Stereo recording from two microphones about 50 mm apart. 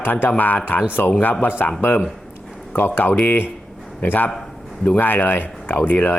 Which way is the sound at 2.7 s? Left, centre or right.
Left.